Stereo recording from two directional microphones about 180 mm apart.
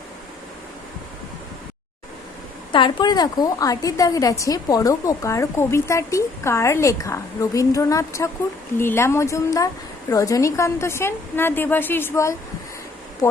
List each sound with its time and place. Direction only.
2.7 s a woman's voice: 25° left (ahead or behind)